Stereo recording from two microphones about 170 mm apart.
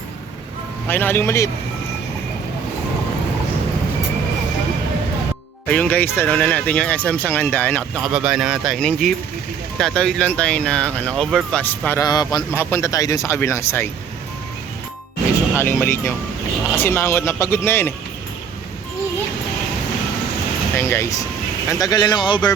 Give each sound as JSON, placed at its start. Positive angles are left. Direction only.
{"t": 0.9, "sound": "speech", "side_deg": 10}
{"t": 5.6, "sound": "speech", "side_deg": 5}
{"t": 7.9, "sound": "speech", "side_deg": -5}
{"t": 12.0, "sound": "speech", "side_deg": 25}
{"t": 15.5, "sound": "speech", "side_deg": 15}
{"t": 20.7, "sound": "speech", "side_deg": 15}